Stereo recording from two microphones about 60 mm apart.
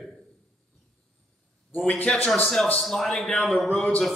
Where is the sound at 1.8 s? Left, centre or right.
Left.